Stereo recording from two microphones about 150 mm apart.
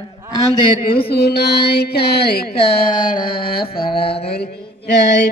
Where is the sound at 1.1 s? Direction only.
90° left.